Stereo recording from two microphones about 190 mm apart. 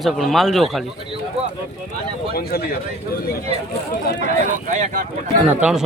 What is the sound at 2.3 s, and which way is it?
Speech, 55° left (ahead or behind).